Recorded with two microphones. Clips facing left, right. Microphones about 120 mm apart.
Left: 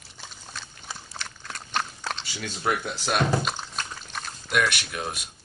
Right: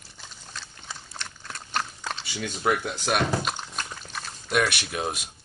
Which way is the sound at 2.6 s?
10° right (ahead or behind).